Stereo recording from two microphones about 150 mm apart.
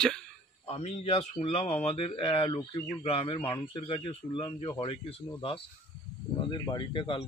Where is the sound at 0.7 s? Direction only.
45° left (ahead or behind).